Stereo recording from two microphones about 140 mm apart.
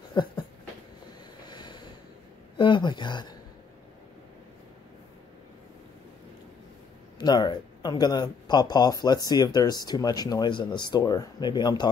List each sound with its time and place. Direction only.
0.1 s a sound: 30° left (ahead or behind)
1.5 s ocean: 30° left (ahead or behind)
2.5 s speech: 35° left (ahead or behind)
7.2 s speech: 30° left (ahead or behind)